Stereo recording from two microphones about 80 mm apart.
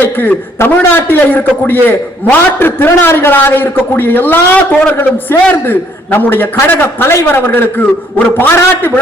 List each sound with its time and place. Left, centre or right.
0.0 s a man's voice: left